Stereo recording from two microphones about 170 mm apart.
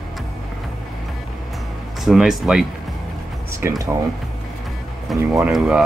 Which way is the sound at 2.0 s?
5° right (ahead or behind).